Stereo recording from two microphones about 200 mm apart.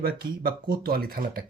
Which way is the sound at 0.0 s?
50° right (ahead or behind).